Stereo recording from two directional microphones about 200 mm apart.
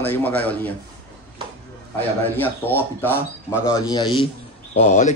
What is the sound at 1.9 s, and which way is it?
A man's voice, 10° left (ahead or behind).